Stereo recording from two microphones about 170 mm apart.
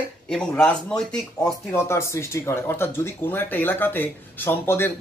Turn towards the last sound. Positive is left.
turn(degrees=15)  # may be behind; listen again after turning